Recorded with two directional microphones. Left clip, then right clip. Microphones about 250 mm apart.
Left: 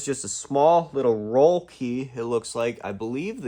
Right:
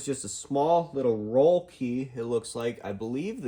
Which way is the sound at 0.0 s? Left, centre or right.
Left.